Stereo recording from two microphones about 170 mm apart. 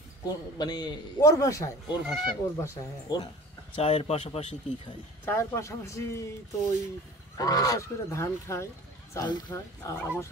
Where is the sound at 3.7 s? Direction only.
35° left (ahead or behind).